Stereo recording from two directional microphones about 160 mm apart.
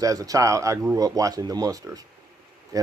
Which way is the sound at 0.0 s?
20° right (ahead or behind).